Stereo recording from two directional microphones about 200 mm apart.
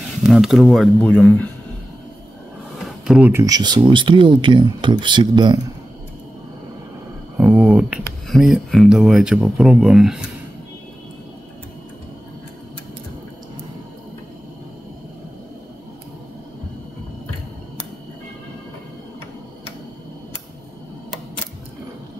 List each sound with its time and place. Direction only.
0.2 s speech: centre (ahead or behind)
3.1 s speech: 5° right (ahead or behind)
3.3 s speech: 20° right (ahead or behind)
7.3 s a sound: 5° right (ahead or behind)
8.3 s speech: centre (ahead or behind)